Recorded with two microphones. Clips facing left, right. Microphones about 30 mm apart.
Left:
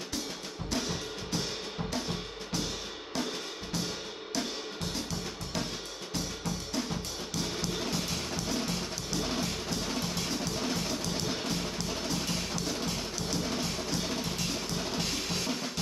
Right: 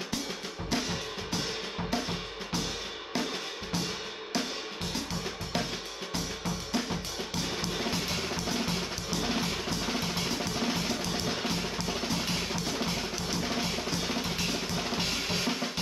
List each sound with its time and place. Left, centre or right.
0.7 s music: centre
7.6 s music: centre